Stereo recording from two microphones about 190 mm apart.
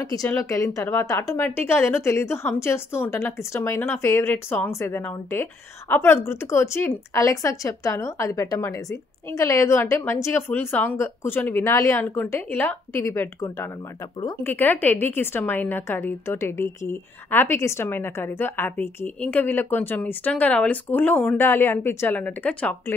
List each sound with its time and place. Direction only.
0.0 s a woman's voice: 20° left (ahead or behind)